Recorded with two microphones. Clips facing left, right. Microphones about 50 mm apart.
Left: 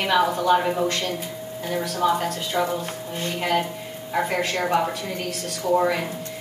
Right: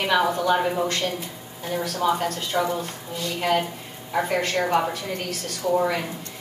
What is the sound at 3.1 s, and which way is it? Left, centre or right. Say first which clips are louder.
Speech: left 1 dB; left.